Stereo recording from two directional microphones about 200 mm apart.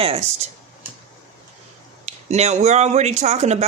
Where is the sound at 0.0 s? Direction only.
30° right (ahead or behind).